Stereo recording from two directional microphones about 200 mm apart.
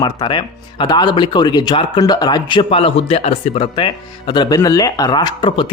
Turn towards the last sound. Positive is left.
turn(degrees=25)  # may be behind; listen again after turning